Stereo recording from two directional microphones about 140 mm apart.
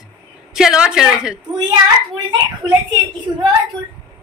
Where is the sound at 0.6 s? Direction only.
5° right (ahead or behind).